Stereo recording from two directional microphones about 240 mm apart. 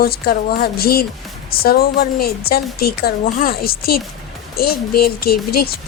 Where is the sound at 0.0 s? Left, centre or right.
Left.